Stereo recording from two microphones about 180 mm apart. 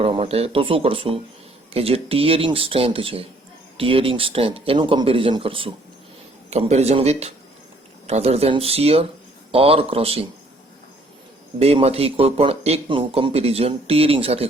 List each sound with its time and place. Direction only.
0.0 s speech: 35° right (ahead or behind)
11.6 s speech: 35° right (ahead or behind)